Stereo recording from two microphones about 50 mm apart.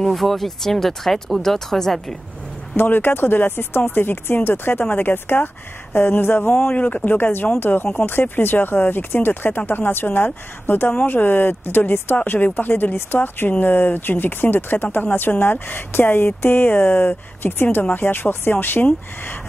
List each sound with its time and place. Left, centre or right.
0.0 s speech: centre
2.7 s speech: left
7.1 s speech: left